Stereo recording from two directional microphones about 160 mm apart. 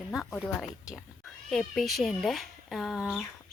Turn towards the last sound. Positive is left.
turn(degrees=0)  # may be behind; listen again after turning